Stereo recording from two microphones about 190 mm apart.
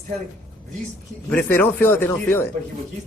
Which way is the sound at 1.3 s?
10° left (ahead or behind).